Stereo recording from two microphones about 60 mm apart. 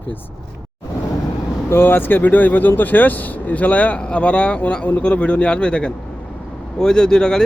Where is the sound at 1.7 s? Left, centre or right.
Left.